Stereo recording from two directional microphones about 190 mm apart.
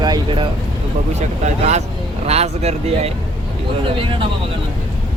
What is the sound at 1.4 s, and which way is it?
Speech, 35° right (ahead or behind).